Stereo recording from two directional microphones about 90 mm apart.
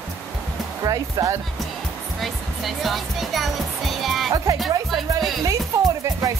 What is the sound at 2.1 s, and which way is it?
Speech, centre (ahead or behind).